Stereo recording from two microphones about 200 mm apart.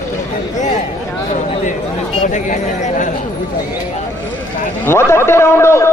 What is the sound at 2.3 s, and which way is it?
Speech, 40° left (ahead or behind).